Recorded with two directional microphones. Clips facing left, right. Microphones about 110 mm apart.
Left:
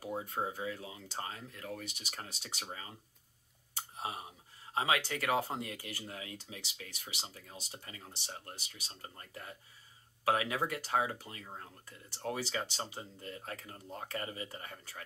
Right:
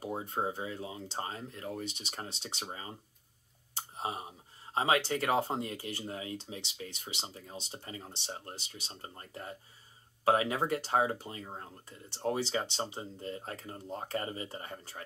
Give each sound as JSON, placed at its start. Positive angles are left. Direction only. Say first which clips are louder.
{"t": 0.0, "sound": "speech", "louder": "right 3 dB", "side_deg": -25}